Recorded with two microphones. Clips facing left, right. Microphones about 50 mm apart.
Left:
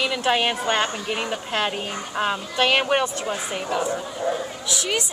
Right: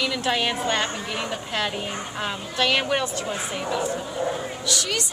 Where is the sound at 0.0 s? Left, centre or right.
Left.